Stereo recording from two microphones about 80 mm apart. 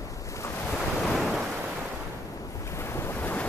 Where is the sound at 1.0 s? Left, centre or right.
Centre.